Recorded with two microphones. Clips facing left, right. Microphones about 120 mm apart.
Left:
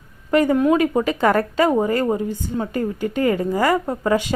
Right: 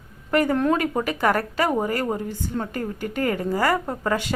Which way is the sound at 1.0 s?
25° left (ahead or behind).